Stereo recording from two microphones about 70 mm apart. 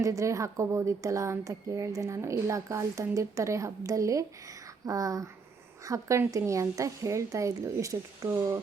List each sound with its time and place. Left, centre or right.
0.0 s a woman's voice: right